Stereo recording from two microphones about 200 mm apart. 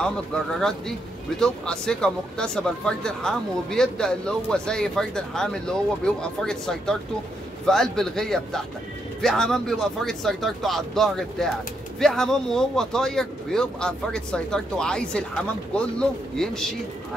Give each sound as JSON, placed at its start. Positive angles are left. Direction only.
{"t": 0.6, "sound": "speech", "side_deg": 5}